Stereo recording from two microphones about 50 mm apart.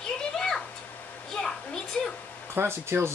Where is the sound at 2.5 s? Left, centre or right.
Right.